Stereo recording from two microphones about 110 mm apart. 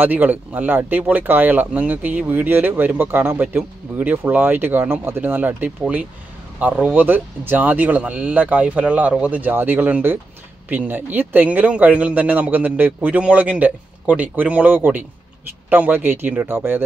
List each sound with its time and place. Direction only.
0.0 s speech: 15° right (ahead or behind)